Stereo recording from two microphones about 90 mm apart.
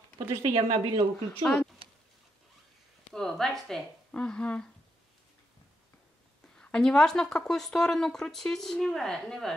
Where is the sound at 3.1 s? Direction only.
5° left (ahead or behind).